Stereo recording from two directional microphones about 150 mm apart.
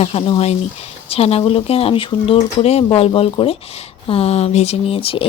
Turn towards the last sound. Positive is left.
turn(degrees=40)  # may be behind; listen again after turning